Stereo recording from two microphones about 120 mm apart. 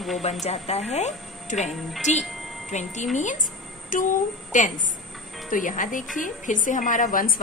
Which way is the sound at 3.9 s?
90° left.